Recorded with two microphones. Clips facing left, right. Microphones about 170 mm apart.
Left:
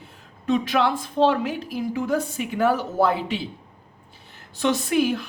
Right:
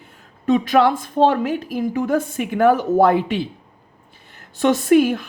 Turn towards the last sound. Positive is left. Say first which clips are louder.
# right 7 dB
turn(degrees=-50)  # may be behind; listen again after turning